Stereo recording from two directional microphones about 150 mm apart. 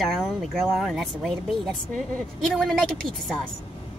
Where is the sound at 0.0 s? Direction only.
Centre (ahead or behind).